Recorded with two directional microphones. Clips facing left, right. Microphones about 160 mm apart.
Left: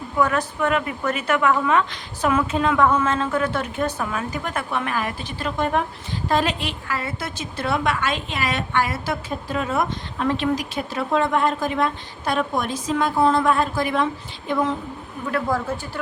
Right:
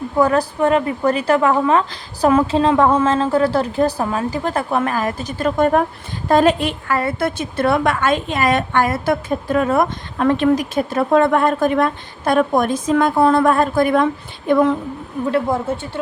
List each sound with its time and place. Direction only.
0.2 s a woman's voice: 35° right (ahead or behind); by 14.7 s 55° right (ahead or behind)
15.3 s a woman's voice: 25° right (ahead or behind)